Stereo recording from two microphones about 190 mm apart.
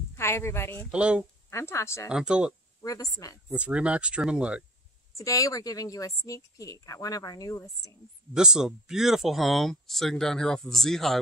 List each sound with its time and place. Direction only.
0.1 s speech: 15° left (ahead or behind)
0.9 s speech: 5° right (ahead or behind)
1.5 s a woman's voice: 15° left (ahead or behind)
2.0 s speech: 5° right (ahead or behind)
2.8 s a woman's voice: 20° left (ahead or behind)
3.4 s speech: 5° right (ahead or behind)
5.1 s a woman's voice: 15° left (ahead or behind)
8.4 s speech: 5° right (ahead or behind)